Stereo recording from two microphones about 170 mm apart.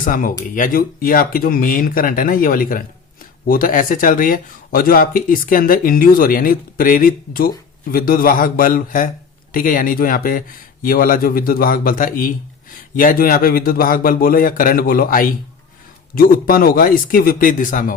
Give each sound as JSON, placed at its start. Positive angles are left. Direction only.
{"t": 0.0, "sound": "speech", "side_deg": 50}